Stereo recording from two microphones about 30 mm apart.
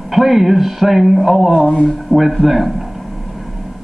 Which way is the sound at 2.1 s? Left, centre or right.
Centre.